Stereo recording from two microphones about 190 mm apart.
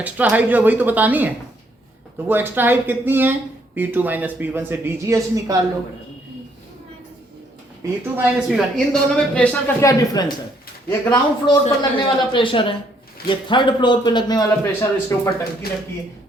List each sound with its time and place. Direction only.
0.0 s speech: 10° right (ahead or behind)
8.1 s a man's voice: 5° right (ahead or behind); by 15.3 s 15° left (ahead or behind)